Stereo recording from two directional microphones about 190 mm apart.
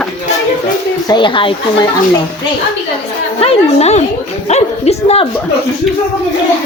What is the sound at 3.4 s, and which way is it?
Speech, 35° left (ahead or behind).